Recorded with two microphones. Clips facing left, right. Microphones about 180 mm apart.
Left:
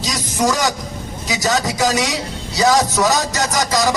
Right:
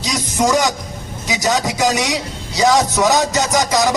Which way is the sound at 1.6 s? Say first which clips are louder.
Right 1 dB; 20° right (ahead or behind).